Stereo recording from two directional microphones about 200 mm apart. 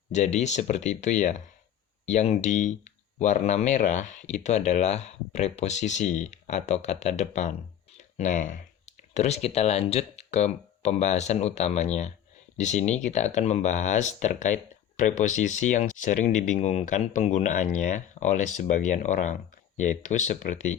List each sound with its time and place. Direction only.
0.1 s speech: 35° left (ahead or behind)